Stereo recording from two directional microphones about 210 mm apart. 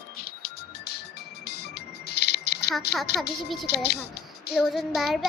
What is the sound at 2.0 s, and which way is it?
Keys jangling, 50° left (ahead or behind).